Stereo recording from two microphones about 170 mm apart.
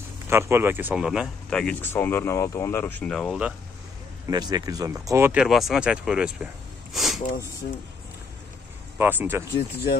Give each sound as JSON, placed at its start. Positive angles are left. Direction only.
{"t": 0.3, "sound": "speech", "side_deg": -15}
{"t": 4.3, "sound": "speech", "side_deg": -25}
{"t": 8.9, "sound": "speech", "side_deg": -10}